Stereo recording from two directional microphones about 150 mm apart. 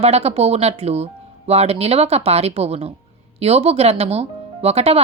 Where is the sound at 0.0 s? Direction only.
45° right (ahead or behind).